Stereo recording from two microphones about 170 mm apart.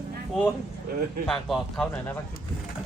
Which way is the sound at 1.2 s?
5° left (ahead or behind).